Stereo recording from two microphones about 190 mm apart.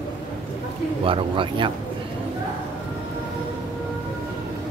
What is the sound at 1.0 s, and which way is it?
Speech, 25° right (ahead or behind).